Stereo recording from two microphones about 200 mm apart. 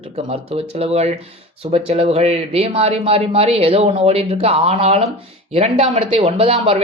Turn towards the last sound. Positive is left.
turn(degrees=-30)  # may be behind; listen again after turning